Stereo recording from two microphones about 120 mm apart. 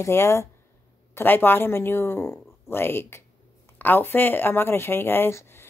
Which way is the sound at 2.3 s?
Centre (ahead or behind).